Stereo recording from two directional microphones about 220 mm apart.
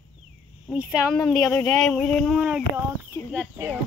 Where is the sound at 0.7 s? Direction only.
5° right (ahead or behind).